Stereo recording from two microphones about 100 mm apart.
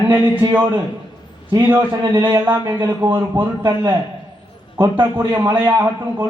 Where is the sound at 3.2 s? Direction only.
45° right (ahead or behind).